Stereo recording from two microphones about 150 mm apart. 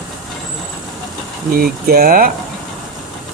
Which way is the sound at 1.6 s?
70° right (ahead or behind).